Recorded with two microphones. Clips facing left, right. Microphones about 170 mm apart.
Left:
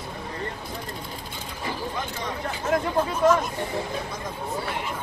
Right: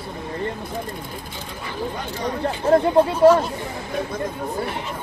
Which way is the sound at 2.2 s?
30° right (ahead or behind).